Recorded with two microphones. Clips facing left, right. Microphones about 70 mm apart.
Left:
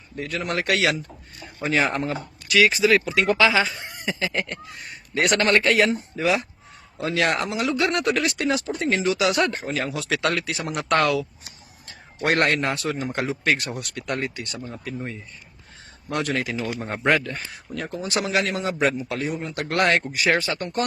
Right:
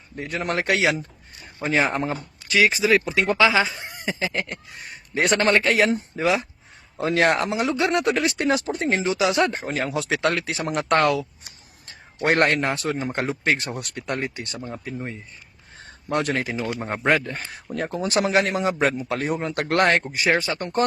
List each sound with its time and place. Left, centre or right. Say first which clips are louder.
0.2 s speech: right 1 dB; right
4.3 s speech: left 1 dB; centre
5.1 s speech: even; right
5.9 s speech: right 1 dB; right
8.4 s speech: right 1 dB; right
13.4 s speech: even; right
14.9 s speech: left 2 dB; centre
16.1 s speech: right 2 dB; right
17.1 s speech: even; centre
17.3 s speech: right 3 dB; right
20.4 s speech: even; right